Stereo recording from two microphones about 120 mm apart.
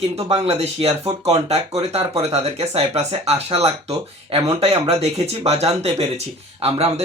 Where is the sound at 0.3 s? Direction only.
55° right (ahead or behind).